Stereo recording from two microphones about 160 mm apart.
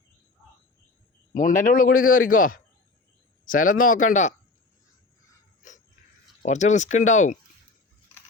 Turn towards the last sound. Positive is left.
turn(degrees=50)  # may be behind; listen again after turning